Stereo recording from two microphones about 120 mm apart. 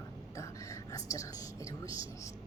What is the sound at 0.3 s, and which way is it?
Whispering, 25° left (ahead or behind).